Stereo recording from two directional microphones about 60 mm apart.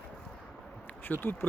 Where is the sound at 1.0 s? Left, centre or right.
Left.